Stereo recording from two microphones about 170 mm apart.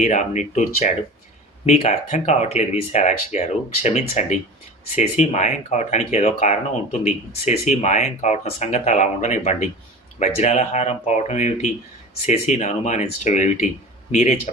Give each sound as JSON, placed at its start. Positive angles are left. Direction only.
{"t": 0.0, "sound": "speech", "side_deg": 45}